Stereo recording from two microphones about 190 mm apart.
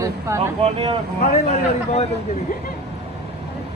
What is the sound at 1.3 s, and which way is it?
Speech, 35° left (ahead or behind).